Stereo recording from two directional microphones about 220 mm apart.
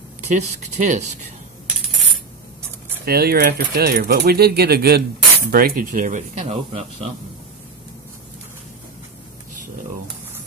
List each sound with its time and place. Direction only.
0.3 s speech: 35° right (ahead or behind)
3.1 s speech: 45° right (ahead or behind); by 7.1 s 25° right (ahead or behind)